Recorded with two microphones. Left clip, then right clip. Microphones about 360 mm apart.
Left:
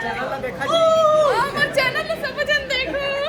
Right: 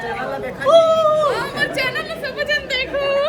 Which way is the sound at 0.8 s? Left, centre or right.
Centre.